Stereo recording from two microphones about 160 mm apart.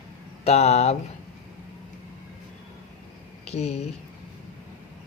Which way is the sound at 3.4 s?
40° left (ahead or behind).